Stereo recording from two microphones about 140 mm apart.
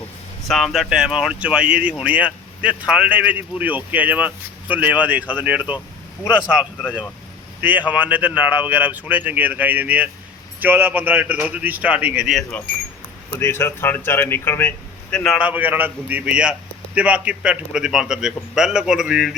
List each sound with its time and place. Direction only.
0.4 s a man's voice: centre (ahead or behind)
13.4 s speech: 15° left (ahead or behind)
15.1 s speech: 5° left (ahead or behind)
15.4 s a man's voice: 10° right (ahead or behind)